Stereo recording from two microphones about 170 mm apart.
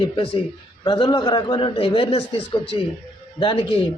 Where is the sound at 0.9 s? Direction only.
30° left (ahead or behind).